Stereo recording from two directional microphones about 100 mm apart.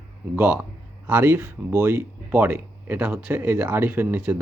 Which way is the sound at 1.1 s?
20° right (ahead or behind).